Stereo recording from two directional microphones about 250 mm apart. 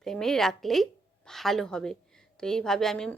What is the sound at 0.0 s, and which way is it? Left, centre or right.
A woman's voice, centre.